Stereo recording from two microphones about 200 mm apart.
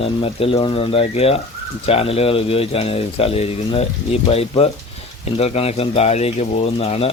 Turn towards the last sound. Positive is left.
turn(degrees=30)  # may be behind; listen again after turning